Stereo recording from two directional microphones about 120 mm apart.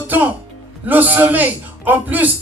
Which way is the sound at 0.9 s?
15° right (ahead or behind).